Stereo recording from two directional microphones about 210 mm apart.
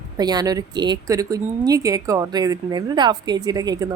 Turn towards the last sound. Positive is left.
turn(degrees=-20)  # may be behind; listen again after turning